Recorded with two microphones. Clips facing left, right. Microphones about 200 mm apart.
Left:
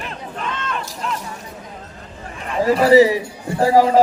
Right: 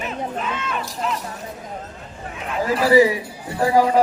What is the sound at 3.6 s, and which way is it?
Speech, 25° left (ahead or behind).